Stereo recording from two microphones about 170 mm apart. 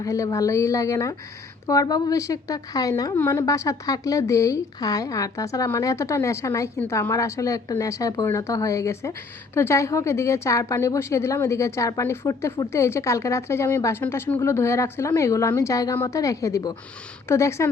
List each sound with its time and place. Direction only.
0.0 s a woman's voice: 20° left (ahead or behind)